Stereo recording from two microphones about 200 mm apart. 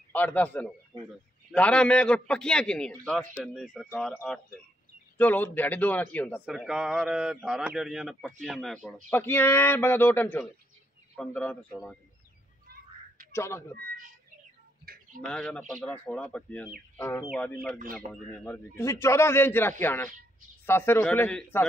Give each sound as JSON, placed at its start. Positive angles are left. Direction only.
{"t": 0.1, "sound": "a man's voice", "side_deg": 10}
{"t": 6.4, "sound": "speech", "side_deg": -5}
{"t": 13.3, "sound": "a man's voice", "side_deg": 15}
{"t": 14.9, "sound": "a sound", "side_deg": -50}
{"t": 15.2, "sound": "a man's voice", "side_deg": 5}
{"t": 17.3, "sound": "a man's voice", "side_deg": 5}